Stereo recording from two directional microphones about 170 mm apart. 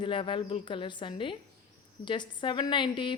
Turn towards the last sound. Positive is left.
turn(degrees=30)  # may be behind; listen again after turning